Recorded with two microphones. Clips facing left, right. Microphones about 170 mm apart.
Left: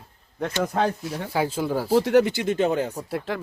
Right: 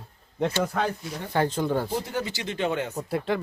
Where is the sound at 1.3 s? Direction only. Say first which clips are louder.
Even; 5° left (ahead or behind).